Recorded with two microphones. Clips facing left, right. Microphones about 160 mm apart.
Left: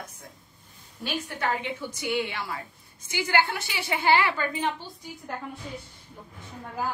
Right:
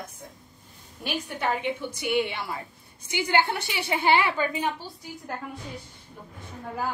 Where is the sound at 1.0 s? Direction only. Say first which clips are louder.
Right 1 dB; 15° right (ahead or behind).